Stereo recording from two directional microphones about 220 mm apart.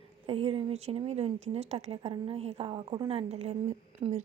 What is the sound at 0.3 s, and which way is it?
Speech, 25° right (ahead or behind).